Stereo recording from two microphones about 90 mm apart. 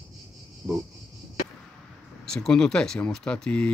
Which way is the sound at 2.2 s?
5° left (ahead or behind).